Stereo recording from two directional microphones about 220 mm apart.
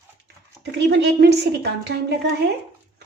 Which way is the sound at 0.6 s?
50° right (ahead or behind).